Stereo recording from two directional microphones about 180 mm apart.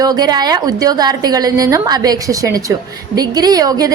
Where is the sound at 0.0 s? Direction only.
20° right (ahead or behind).